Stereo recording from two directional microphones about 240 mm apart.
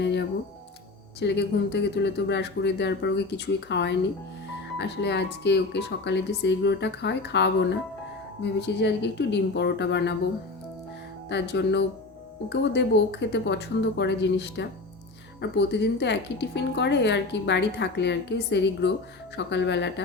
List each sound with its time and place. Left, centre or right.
0.0 s music: left
1.2 s speech: left
11.3 s speech: left